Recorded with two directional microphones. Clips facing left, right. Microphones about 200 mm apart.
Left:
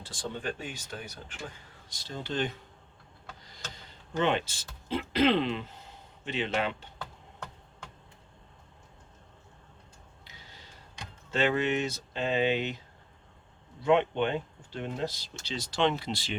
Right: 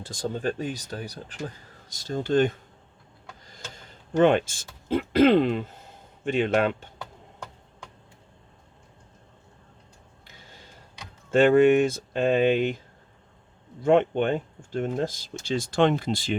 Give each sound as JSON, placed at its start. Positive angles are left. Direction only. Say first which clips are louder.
{"t": 0.0, "sound": "speech", "louder": "right 7 dB", "side_deg": -40}
{"t": 4.2, "sound": "speech", "louder": "right 9 dB", "side_deg": -50}
{"t": 11.3, "sound": "speech", "louder": "right 11 dB", "side_deg": -50}
{"t": 13.8, "sound": "speech", "louder": "right 5 dB", "side_deg": -50}